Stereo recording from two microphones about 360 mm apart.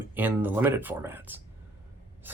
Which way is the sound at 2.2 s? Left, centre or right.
Centre.